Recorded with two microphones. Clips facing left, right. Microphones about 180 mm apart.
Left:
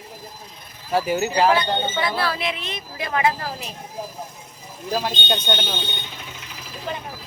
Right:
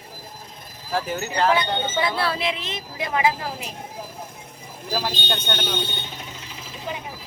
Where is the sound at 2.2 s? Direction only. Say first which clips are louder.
Even; 25° right (ahead or behind); by 3.7 s 10° right (ahead or behind).